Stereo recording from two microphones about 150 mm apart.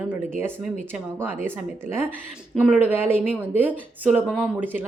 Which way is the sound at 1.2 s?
15° right (ahead or behind).